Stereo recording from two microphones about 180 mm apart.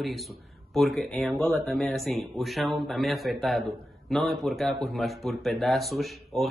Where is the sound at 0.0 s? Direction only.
Centre (ahead or behind).